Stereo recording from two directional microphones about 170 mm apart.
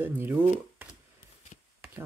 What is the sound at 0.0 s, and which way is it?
Speech, 10° right (ahead or behind).